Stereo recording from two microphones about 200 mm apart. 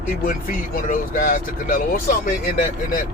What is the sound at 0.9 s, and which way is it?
Speech, 45° left (ahead or behind).